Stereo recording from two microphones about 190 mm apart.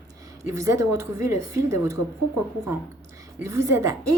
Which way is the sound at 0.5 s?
15° right (ahead or behind).